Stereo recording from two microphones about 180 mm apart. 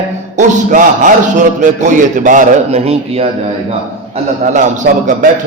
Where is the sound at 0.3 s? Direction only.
45° right (ahead or behind).